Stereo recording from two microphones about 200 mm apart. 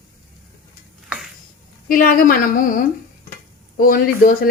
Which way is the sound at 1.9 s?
45° left (ahead or behind).